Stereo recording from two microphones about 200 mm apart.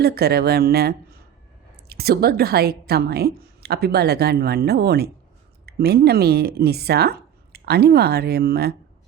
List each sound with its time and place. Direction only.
0.0 s a woman's voice: 50° right (ahead or behind)